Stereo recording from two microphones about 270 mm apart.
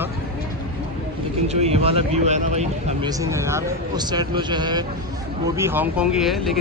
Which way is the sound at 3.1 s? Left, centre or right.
Centre.